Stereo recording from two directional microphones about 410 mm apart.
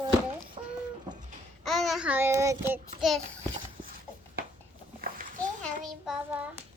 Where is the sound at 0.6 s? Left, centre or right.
Centre.